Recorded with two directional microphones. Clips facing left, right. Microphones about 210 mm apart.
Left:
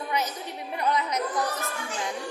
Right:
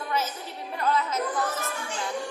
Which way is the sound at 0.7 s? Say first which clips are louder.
Even; 15° left (ahead or behind).